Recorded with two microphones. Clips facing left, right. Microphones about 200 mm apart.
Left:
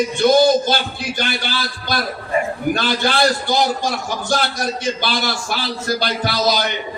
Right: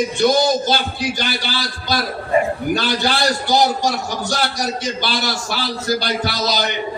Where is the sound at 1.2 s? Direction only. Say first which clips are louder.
Even; 55° left (ahead or behind).